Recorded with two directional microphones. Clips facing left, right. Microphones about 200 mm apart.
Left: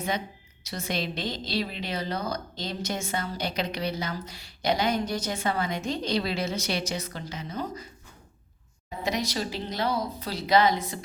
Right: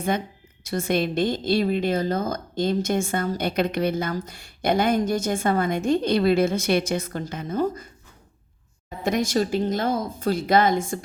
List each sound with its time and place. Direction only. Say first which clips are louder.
0.6 s a woman's voice: right 8 dB; 50° right (ahead or behind)
9.0 s a woman's voice: right 7 dB; 50° right (ahead or behind)